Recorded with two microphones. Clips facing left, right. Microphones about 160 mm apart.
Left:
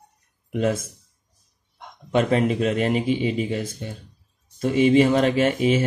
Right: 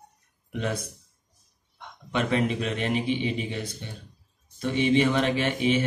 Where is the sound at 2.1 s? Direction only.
40° left (ahead or behind).